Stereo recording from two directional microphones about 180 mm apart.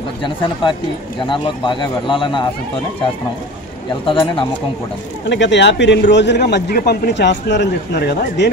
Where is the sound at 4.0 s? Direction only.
30° left (ahead or behind).